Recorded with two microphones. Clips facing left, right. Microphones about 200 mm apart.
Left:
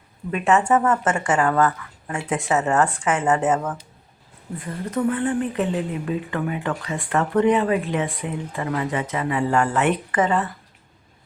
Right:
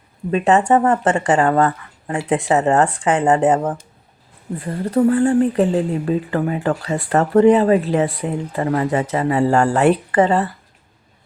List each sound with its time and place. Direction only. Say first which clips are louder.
0.3 s a woman's voice: right 4 dB; 35° right (ahead or behind)